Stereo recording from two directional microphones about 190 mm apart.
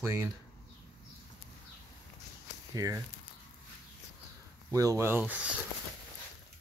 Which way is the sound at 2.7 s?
20° right (ahead or behind).